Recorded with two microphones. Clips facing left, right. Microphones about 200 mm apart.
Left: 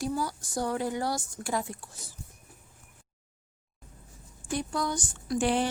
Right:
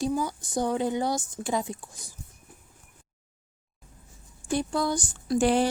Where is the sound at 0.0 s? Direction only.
15° right (ahead or behind).